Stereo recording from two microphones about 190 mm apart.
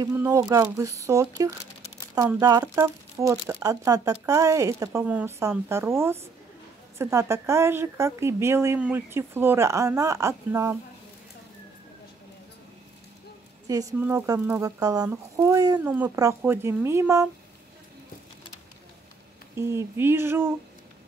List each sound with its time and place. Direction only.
0.0 s speech: 15° right (ahead or behind)
13.7 s speech: 15° right (ahead or behind)
19.5 s speech: 15° right (ahead or behind)